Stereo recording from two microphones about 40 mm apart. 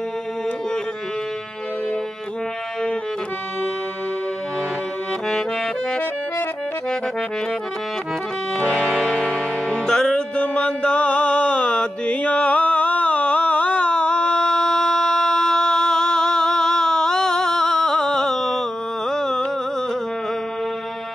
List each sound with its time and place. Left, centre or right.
9.3 s music: centre
10.1 s mantra: left; by 18.6 s centre
19.0 s a sound: centre